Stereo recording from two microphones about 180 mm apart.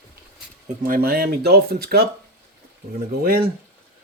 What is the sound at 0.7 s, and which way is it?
Speech, 50° right (ahead or behind).